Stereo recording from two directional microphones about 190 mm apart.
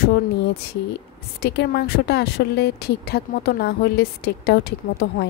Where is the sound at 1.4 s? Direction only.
60° left (ahead or behind).